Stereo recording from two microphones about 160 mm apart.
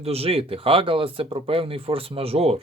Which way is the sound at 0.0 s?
40° right (ahead or behind).